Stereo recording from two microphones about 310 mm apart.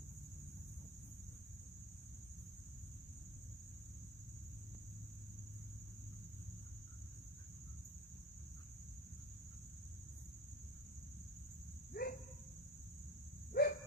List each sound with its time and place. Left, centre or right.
11.9 s cricket: left
13.5 s cricket: left